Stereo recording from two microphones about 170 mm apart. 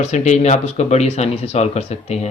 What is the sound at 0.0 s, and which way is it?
Speech, 45° left (ahead or behind).